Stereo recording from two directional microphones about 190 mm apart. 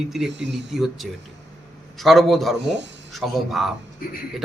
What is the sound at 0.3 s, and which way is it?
Speech, 65° right (ahead or behind).